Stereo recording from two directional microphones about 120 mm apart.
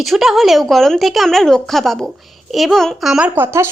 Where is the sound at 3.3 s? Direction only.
20° right (ahead or behind).